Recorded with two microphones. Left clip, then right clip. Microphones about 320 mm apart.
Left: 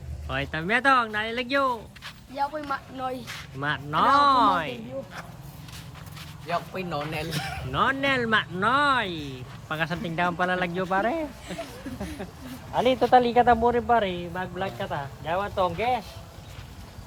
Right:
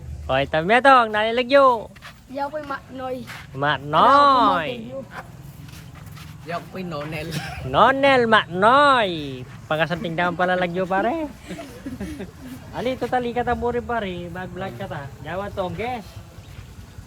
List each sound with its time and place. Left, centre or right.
0.3 s speech: centre
6.1 s speech: centre
7.7 s speech: centre
11.9 s a sound: centre
12.7 s speech: centre